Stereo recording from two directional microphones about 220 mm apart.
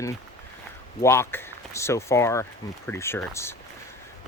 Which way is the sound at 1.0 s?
10° left (ahead or behind).